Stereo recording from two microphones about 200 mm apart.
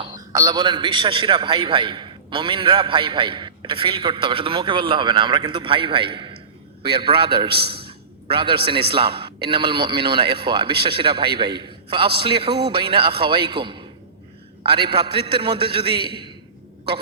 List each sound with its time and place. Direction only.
0.0 s a man's voice: 20° right (ahead or behind)
15.0 s a man's voice: 25° right (ahead or behind)